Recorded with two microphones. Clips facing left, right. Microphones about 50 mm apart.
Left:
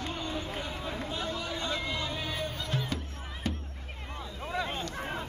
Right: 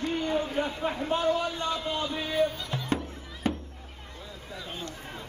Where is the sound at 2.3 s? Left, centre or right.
Centre.